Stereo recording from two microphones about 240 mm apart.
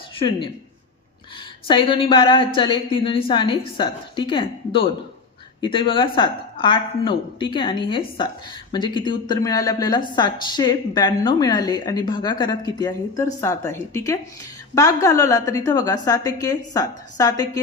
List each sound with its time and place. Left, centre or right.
0.2 s a woman's voice: centre
1.6 s a woman's voice: left